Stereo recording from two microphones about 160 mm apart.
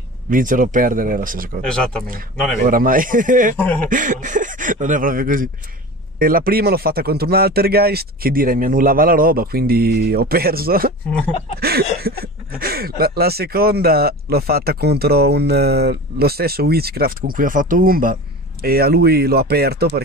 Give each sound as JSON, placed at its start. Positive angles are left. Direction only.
{"t": 0.3, "sound": "speech", "side_deg": -55}
{"t": 1.6, "sound": "speech", "side_deg": 5}
{"t": 2.6, "sound": "speech", "side_deg": -60}
{"t": 3.5, "sound": "speech", "side_deg": 10}
{"t": 3.9, "sound": "speech", "side_deg": -55}
{"t": 18.6, "sound": "speech", "side_deg": -70}